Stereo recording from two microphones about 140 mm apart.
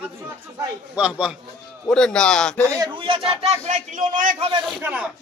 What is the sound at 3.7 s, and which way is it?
Speech, 60° right (ahead or behind).